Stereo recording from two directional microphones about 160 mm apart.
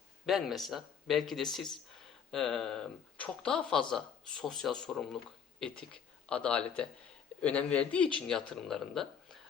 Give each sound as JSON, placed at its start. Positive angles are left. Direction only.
{"t": 0.3, "sound": "speech", "side_deg": 0}